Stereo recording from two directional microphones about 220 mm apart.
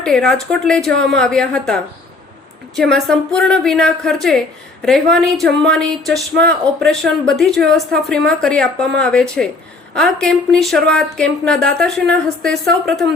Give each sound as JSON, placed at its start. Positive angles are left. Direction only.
{"t": 0.0, "sound": "speech", "side_deg": 5}
{"t": 0.9, "sound": "a woman's voice", "side_deg": -50}
{"t": 1.2, "sound": "speech", "side_deg": 5}